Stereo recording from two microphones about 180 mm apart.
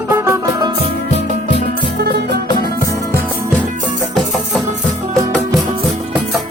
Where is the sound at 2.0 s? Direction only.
65° right (ahead or behind).